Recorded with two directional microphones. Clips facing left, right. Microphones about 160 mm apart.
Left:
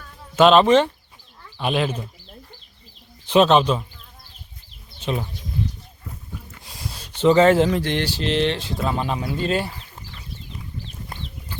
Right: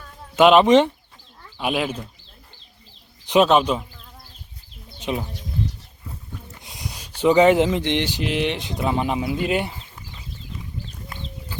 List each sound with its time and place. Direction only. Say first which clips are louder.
0.3 s speech: right 1 dB; 15° right (ahead or behind)
3.2 s speech: left 1 dB; 10° right (ahead or behind)
4.9 s a sound: even; 15° right (ahead or behind)
6.6 s speech: right 1 dB; 20° right (ahead or behind)